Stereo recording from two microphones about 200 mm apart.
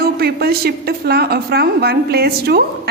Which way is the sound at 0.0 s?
50° right (ahead or behind).